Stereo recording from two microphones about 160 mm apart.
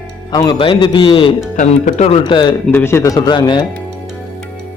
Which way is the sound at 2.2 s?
25° left (ahead or behind).